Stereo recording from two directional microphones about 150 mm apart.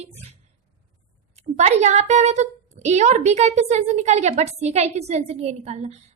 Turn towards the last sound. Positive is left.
turn(degrees=-45)  # may be behind; listen again after turning